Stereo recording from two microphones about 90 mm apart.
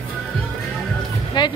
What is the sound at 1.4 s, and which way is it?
Music, 60° left (ahead or behind).